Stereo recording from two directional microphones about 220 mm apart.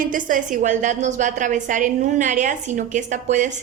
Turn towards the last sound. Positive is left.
turn(degrees=-35)  # may be behind; listen again after turning